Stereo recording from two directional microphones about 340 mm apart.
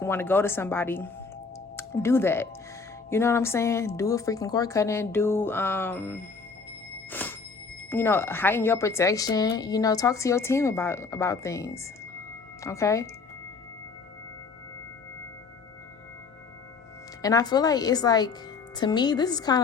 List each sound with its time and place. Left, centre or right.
0.0 s speech: centre
7.1 s music: centre
7.9 s speech: centre
17.2 s speech: centre